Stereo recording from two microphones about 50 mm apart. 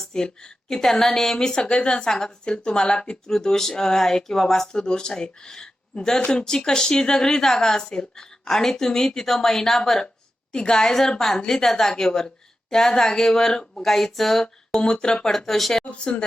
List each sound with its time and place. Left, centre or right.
0.0 s a woman's voice: centre
15.8 s speech: left